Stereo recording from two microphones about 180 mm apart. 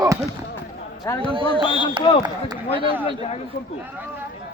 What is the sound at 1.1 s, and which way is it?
Speech, 15° left (ahead or behind).